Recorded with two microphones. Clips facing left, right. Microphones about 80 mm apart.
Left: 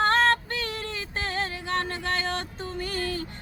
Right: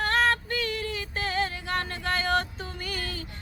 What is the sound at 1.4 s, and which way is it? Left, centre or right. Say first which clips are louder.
Music: left 1 dB; left.